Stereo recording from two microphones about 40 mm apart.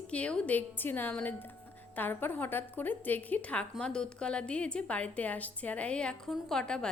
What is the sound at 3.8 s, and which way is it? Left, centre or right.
A woman's voice, left.